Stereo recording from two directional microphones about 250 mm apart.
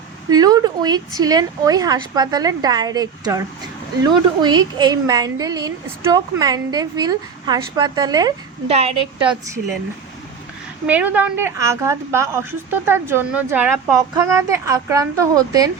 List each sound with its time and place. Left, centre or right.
0.3 s a woman's voice: centre
10.8 s a woman's voice: centre